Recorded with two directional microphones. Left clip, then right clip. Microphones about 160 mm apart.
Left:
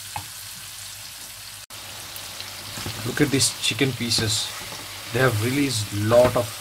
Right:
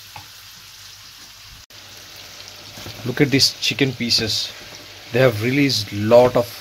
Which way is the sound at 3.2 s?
40° right (ahead or behind).